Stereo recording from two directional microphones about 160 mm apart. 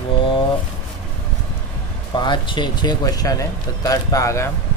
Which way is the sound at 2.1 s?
30° left (ahead or behind).